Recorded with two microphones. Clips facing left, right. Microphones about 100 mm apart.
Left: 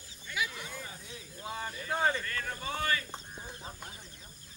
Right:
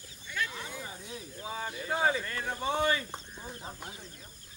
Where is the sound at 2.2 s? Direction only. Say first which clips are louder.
Right 4 dB; 20° right (ahead or behind).